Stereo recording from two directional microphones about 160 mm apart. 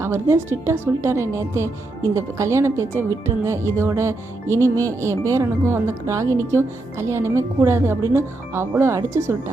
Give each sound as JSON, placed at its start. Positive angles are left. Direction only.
{"t": 0.0, "sound": "speech", "side_deg": -15}